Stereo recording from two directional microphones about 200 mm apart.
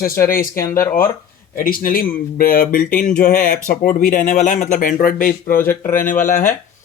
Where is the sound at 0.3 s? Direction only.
45° left (ahead or behind).